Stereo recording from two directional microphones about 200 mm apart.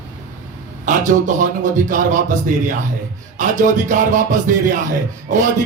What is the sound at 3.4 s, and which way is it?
Music, 40° right (ahead or behind).